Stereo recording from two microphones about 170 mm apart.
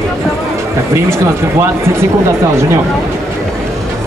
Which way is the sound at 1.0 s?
15° right (ahead or behind).